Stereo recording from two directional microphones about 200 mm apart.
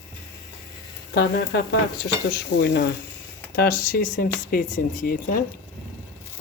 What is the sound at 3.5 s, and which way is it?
Speech, 50° left (ahead or behind).